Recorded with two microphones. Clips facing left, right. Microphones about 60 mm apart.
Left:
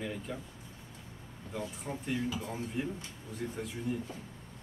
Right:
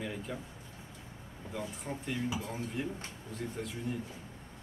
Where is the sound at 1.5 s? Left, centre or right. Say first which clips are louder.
Left 1 dB; centre.